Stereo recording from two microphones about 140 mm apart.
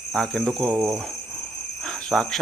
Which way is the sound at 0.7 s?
20° right (ahead or behind).